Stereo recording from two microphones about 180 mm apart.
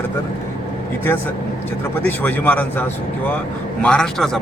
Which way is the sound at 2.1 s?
10° left (ahead or behind).